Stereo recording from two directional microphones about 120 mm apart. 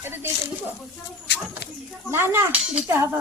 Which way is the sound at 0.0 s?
20° right (ahead or behind).